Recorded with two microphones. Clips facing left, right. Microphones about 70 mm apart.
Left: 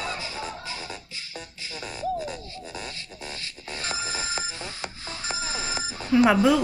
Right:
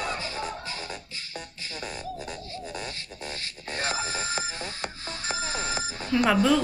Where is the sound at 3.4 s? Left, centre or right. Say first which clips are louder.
Right 6 dB; right.